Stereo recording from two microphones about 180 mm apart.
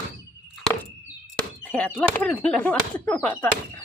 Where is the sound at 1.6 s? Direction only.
5° left (ahead or behind).